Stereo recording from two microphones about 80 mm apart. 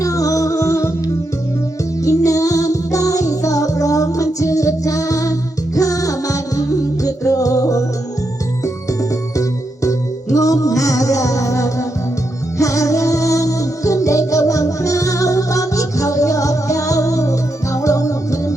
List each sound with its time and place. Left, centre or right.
0.0 s music: left
2.0 s music: left